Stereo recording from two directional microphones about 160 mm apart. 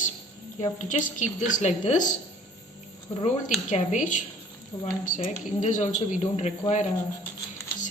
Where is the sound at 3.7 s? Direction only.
50° left (ahead or behind).